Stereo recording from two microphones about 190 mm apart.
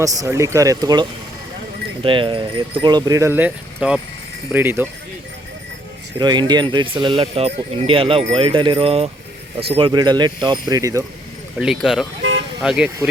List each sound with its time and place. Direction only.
0.0 s speech: 15° right (ahead or behind)
6.1 s speech: 20° right (ahead or behind)
11.5 s speech: centre (ahead or behind)